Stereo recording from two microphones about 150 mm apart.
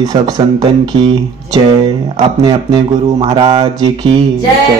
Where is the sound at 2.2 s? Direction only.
30° right (ahead or behind).